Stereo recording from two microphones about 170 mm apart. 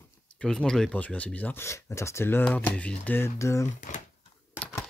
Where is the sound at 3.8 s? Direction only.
50° left (ahead or behind).